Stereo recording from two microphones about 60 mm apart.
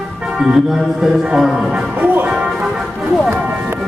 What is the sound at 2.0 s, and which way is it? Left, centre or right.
Music, right.